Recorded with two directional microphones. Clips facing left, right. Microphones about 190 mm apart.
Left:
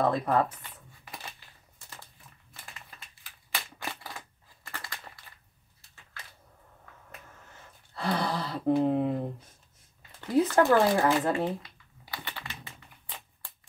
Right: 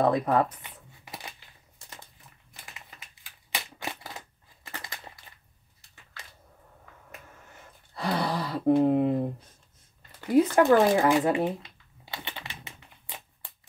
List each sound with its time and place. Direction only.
0.0 s shuffling cards: 15° right (ahead or behind)
3.5 s a sound: 20° right (ahead or behind)
7.9 s speech: 15° right (ahead or behind)
10.3 s shuffling cards: 15° right (ahead or behind)